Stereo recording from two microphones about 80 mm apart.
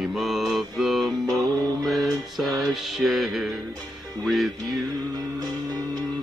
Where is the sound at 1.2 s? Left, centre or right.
Right.